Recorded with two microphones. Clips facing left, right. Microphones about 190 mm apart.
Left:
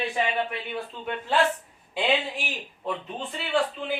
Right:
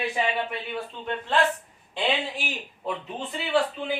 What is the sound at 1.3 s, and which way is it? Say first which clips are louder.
Speech: even; 10° left (ahead or behind).